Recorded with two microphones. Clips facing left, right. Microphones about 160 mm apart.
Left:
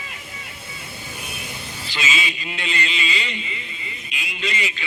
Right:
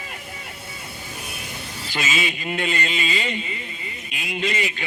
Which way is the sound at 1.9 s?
50° right (ahead or behind).